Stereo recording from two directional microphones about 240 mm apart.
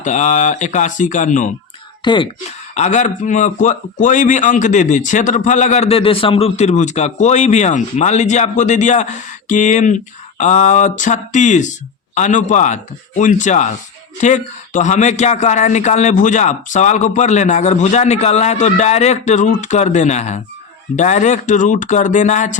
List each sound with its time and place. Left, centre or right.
0.0 s a man's voice: left
2.0 s a man's voice: centre